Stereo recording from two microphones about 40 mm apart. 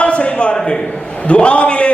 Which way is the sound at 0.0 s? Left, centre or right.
Left.